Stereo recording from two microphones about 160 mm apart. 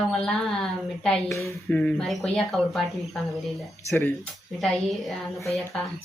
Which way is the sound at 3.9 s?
10° left (ahead or behind).